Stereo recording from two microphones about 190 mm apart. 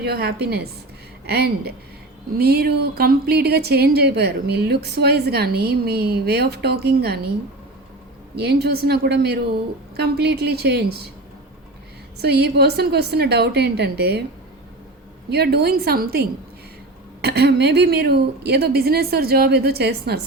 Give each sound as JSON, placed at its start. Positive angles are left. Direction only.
{"t": 0.0, "sound": "speech", "side_deg": -60}
{"t": 8.4, "sound": "speech", "side_deg": -60}
{"t": 12.2, "sound": "speech", "side_deg": -60}
{"t": 15.3, "sound": "speech", "side_deg": -55}